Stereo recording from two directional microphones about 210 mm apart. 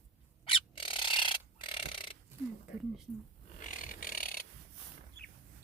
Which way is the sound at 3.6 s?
40° left (ahead or behind).